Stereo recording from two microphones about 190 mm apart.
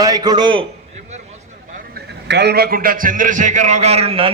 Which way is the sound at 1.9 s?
65° right (ahead or behind).